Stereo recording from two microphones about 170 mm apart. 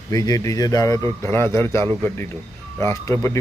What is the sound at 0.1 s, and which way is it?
A man's voice, 20° left (ahead or behind).